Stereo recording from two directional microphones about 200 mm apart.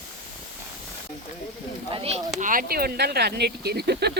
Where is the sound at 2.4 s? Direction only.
45° right (ahead or behind).